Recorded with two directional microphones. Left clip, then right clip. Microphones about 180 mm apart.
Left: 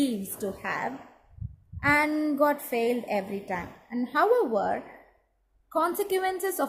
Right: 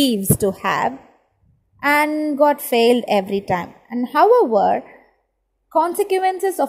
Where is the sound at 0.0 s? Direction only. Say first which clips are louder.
Right 12 dB; 50° right (ahead or behind).